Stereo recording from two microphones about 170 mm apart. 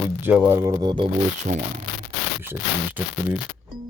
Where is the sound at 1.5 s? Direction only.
45° right (ahead or behind).